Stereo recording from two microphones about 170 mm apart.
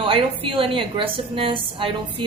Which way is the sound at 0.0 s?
30° right (ahead or behind).